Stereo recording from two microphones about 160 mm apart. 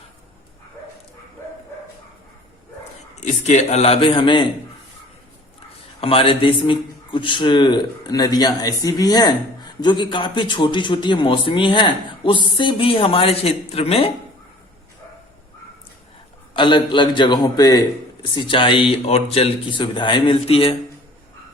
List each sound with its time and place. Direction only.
3.2 s speech: 45° left (ahead or behind); by 4.4 s 30° left (ahead or behind)
6.0 s speech: 35° left (ahead or behind)
16.6 s speech: 30° left (ahead or behind)